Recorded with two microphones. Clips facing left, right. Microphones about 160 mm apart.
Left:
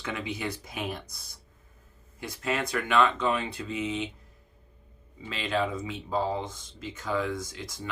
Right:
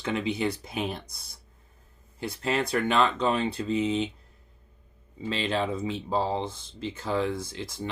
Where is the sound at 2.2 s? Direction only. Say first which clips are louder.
Right 3 dB; 30° right (ahead or behind).